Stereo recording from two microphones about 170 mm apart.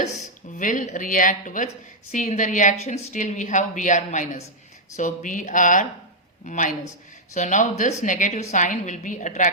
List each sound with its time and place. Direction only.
0.0 s a woman's voice: 45° left (ahead or behind)